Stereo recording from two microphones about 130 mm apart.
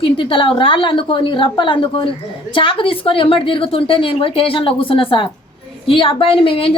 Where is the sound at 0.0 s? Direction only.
45° left (ahead or behind).